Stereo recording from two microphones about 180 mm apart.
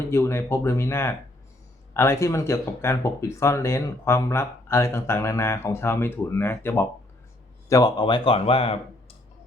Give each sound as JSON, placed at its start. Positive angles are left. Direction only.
{"t": 0.1, "sound": "speech", "side_deg": 15}